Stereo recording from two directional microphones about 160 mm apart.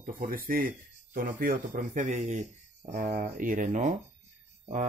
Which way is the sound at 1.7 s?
50° right (ahead or behind).